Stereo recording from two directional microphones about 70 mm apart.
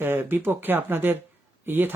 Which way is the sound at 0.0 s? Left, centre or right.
Right.